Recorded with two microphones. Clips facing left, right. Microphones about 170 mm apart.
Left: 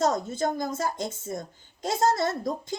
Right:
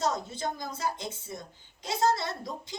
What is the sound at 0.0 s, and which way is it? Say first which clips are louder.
A woman's voice: left 6 dB; 45° left (ahead or behind).